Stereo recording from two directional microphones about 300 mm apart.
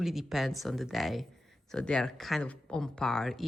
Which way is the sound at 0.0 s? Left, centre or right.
Centre.